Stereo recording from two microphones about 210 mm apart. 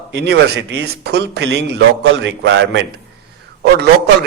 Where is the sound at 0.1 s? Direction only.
55° right (ahead or behind).